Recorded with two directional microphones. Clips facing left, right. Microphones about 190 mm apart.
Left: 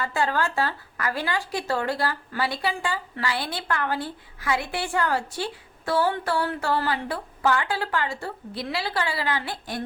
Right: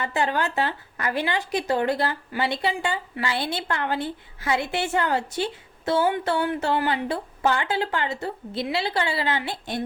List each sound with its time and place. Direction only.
0.0 s speech: 20° right (ahead or behind)